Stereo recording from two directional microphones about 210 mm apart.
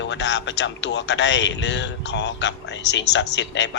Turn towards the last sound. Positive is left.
turn(degrees=60)  # may be behind; listen again after turning